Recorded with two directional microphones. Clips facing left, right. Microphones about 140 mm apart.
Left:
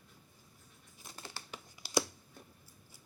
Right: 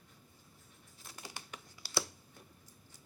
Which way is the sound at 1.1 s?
10° right (ahead or behind).